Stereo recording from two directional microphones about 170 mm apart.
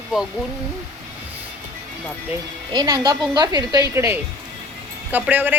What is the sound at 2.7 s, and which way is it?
A woman's voice, 20° right (ahead or behind).